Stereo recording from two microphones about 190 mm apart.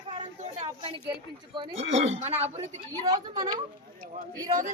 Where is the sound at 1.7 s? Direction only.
90° right.